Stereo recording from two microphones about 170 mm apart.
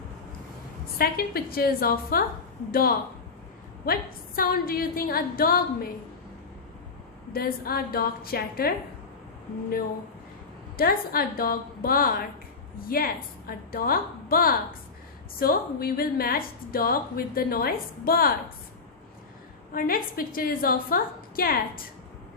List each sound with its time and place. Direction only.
0.9 s a woman's voice: 65° left (ahead or behind)
7.3 s a woman's voice: 60° left (ahead or behind)
10.8 s a woman's voice: 60° left (ahead or behind)
19.7 s a woman's voice: 55° left (ahead or behind)